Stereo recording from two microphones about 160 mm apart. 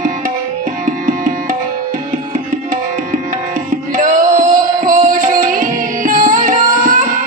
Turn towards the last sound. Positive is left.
turn(degrees=-55)  # may be behind; listen again after turning